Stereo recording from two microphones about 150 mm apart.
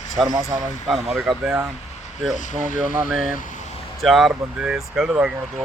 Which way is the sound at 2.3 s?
55° left (ahead or behind).